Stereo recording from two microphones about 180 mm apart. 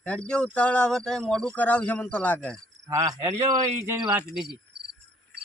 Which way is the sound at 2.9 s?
15° right (ahead or behind).